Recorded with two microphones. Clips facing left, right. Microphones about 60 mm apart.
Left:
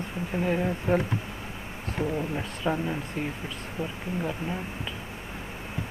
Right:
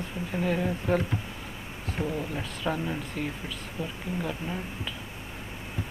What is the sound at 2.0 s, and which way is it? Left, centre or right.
Speech, centre.